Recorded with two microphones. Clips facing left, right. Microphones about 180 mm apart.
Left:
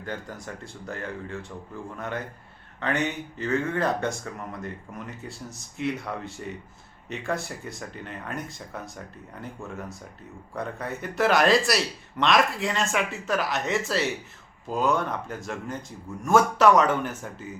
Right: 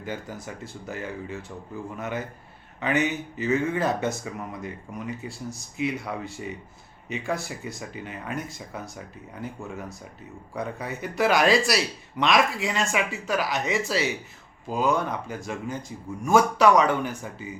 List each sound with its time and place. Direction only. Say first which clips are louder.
0.0 s speech: right 1 dB; 5° right (ahead or behind)